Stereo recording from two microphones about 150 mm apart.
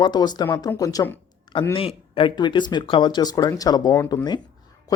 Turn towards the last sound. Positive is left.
turn(degrees=25)  # may be behind; listen again after turning